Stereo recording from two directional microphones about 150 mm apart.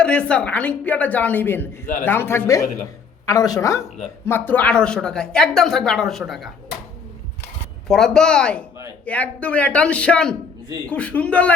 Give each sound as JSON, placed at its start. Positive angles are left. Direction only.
{"t": 0.0, "sound": "a woman's voice", "side_deg": 5}
{"t": 7.9, "sound": "speech", "side_deg": 5}